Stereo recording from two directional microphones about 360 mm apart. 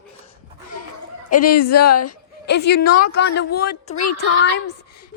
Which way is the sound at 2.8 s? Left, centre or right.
Left.